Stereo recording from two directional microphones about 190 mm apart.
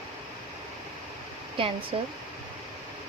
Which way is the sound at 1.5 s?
30° right (ahead or behind).